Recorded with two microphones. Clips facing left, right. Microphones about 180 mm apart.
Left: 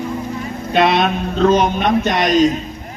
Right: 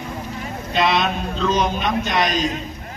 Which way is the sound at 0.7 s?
55° left (ahead or behind).